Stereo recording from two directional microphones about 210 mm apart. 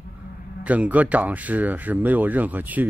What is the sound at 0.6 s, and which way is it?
Speech, 5° right (ahead or behind).